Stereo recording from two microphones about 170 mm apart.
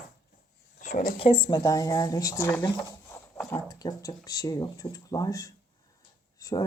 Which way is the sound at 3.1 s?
10° left (ahead or behind).